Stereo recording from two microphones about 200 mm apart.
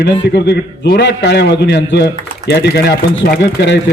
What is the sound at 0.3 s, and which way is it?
A man's voice, 60° left (ahead or behind).